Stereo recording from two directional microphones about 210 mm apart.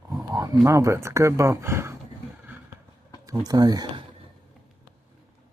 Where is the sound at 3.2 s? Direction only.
15° right (ahead or behind).